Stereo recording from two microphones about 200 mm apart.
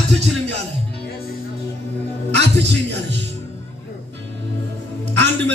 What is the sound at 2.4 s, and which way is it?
Speech, 60° right (ahead or behind).